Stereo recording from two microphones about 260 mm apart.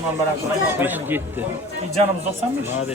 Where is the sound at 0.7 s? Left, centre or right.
Centre.